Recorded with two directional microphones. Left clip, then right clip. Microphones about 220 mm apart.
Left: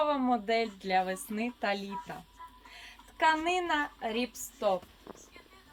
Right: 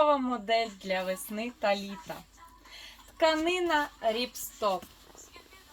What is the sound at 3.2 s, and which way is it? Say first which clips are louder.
A woman's voice: right 1 dB; 35° left (ahead or behind).